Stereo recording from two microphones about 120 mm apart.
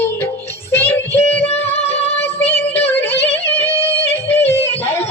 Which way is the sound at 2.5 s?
15° left (ahead or behind).